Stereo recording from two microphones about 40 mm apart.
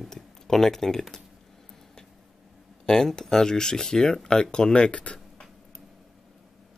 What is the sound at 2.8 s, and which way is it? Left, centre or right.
Speech, centre.